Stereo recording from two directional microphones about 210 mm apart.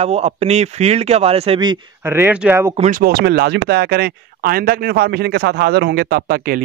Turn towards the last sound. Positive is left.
turn(degrees=-45)  # may be behind; listen again after turning